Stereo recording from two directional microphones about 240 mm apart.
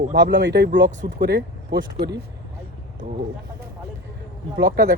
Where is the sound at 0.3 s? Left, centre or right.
Right.